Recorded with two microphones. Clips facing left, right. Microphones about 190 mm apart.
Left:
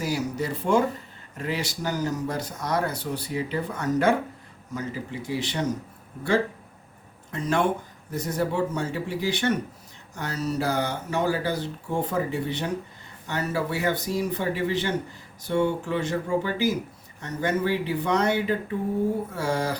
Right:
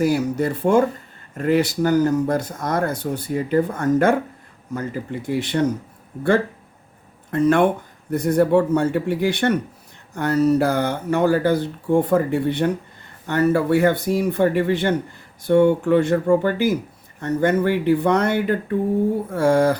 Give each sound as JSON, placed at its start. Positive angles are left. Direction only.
{"t": 0.0, "sound": "speech", "side_deg": -55}
{"t": 7.3, "sound": "speech", "side_deg": -55}